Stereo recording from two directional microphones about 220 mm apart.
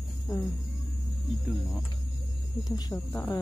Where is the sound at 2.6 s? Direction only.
15° left (ahead or behind).